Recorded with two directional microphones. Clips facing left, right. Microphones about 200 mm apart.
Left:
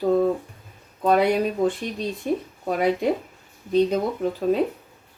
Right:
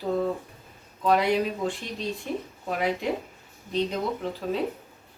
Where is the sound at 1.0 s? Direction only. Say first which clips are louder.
Left 3 dB; 50° left (ahead or behind).